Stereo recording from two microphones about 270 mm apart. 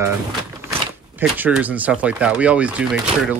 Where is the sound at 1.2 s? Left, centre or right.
Centre.